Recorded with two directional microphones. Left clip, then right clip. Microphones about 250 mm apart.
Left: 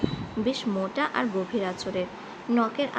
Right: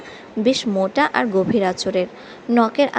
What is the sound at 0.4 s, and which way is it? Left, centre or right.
A woman's voice, right.